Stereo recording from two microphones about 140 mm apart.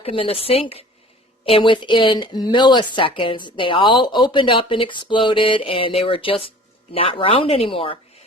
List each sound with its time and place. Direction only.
0.0 s a woman's voice: 40° left (ahead or behind)